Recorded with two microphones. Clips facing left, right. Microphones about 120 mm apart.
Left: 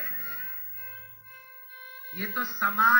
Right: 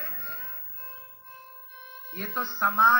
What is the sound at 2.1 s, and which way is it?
Speech, 35° right (ahead or behind).